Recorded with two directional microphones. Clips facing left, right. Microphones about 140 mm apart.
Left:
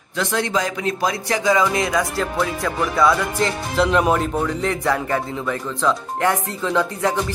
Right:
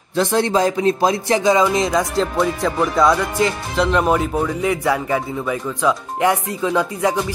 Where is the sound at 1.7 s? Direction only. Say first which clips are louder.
Right 3 dB; 20° right (ahead or behind).